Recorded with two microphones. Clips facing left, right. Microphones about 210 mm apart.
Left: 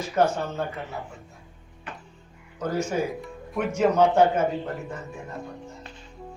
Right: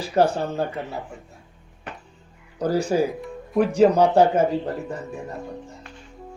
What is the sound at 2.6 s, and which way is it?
Speech, 35° right (ahead or behind).